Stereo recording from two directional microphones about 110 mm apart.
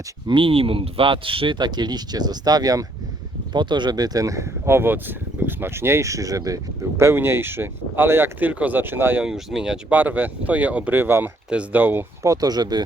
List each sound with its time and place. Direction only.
0.3 s speech: 50° right (ahead or behind); by 9.2 s 20° right (ahead or behind)
9.2 s speech: 5° right (ahead or behind)
12.2 s speech: 35° right (ahead or behind)